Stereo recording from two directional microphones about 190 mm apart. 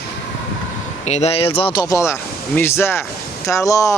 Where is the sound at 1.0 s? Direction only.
35° left (ahead or behind).